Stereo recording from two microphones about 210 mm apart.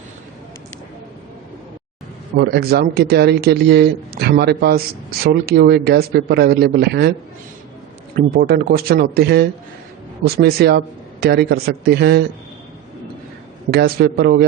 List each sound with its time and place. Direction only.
2.4 s speech: 50° right (ahead or behind)
8.1 s speech: 45° right (ahead or behind)
13.7 s speech: 50° right (ahead or behind)